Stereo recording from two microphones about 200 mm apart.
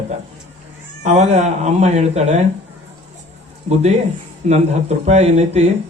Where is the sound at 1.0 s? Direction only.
35° right (ahead or behind).